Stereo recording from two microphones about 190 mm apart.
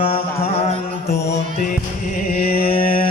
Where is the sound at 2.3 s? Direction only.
50° left (ahead or behind).